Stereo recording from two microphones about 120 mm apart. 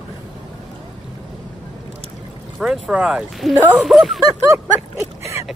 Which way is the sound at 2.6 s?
5° right (ahead or behind).